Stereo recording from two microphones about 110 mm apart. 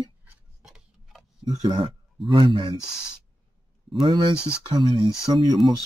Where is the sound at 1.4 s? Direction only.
35° right (ahead or behind).